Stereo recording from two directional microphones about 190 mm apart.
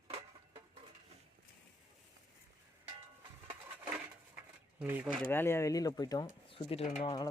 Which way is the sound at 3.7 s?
5° right (ahead or behind).